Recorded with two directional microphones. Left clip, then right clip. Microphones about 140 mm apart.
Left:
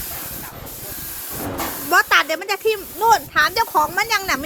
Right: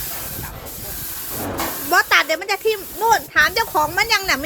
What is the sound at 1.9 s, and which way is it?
Speech, 15° left (ahead or behind).